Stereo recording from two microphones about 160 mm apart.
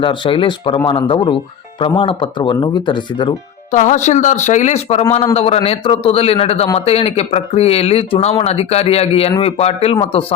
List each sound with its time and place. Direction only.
0.0 s speech: 30° left (ahead or behind)
3.7 s speech: 50° left (ahead or behind)